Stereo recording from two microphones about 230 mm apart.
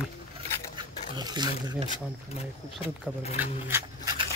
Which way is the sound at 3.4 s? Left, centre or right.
Centre.